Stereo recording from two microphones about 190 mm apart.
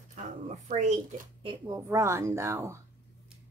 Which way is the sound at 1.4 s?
20° right (ahead or behind).